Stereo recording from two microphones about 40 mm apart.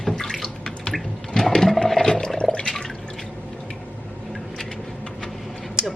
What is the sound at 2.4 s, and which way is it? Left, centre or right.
Water, left.